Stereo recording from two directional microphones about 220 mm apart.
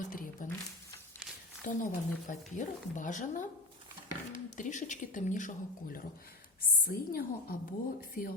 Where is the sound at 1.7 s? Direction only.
35° left (ahead or behind).